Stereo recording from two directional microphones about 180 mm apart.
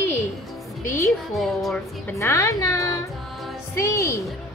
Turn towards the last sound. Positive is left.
turn(degrees=15)  # may be behind; listen again after turning